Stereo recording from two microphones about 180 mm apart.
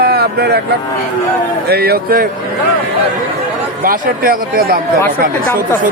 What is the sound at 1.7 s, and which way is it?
Speech, 60° right (ahead or behind).